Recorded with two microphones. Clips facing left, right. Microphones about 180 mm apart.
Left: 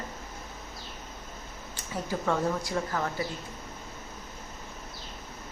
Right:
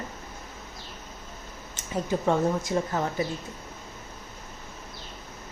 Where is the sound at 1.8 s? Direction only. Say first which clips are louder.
Right 5 dB; 20° right (ahead or behind).